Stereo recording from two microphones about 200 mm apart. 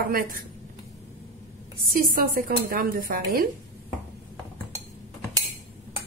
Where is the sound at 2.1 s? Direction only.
45° right (ahead or behind).